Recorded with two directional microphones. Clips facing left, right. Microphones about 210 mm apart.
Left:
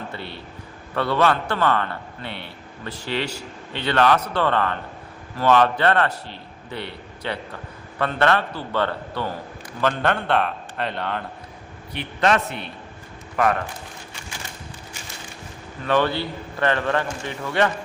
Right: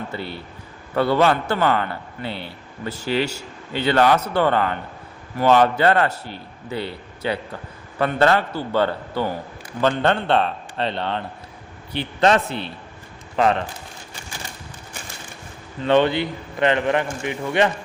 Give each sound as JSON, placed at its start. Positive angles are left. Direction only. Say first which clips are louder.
{"t": 0.9, "sound": "a man's voice", "louder": "right 3 dB", "side_deg": -25}
{"t": 6.2, "sound": "a man's voice", "louder": "right 4 dB", "side_deg": 25}
{"t": 7.9, "sound": "a man's voice", "louder": "right 3 dB", "side_deg": -25}
{"t": 15.8, "sound": "a man's voice", "louder": "right 4 dB", "side_deg": -25}